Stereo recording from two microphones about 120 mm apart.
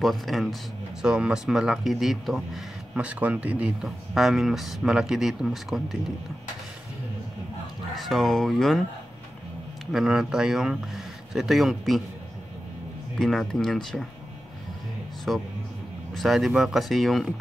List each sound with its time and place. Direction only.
0.0 s speech: centre (ahead or behind)
7.9 s speech: centre (ahead or behind)
9.9 s speech: 5° right (ahead or behind)
13.2 s speech: centre (ahead or behind)
15.3 s speech: 5° right (ahead or behind)